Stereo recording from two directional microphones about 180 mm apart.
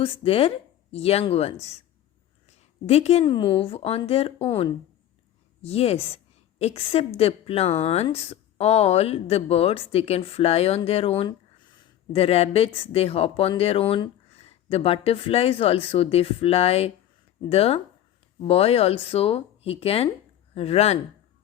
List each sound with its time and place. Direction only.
0.0 s speech: 30° left (ahead or behind)
2.8 s speech: 35° left (ahead or behind)